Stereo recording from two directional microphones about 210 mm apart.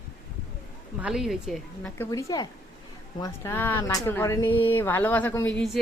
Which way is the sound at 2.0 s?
15° left (ahead or behind).